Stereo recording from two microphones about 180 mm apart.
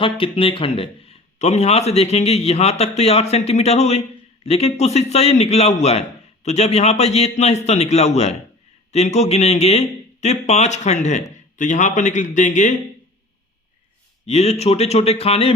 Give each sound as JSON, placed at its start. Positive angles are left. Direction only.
{"t": 0.0, "sound": "speech", "side_deg": 30}
{"t": 14.3, "sound": "speech", "side_deg": 35}